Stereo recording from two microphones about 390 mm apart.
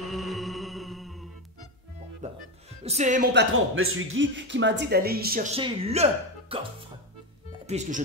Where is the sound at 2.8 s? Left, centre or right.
Centre.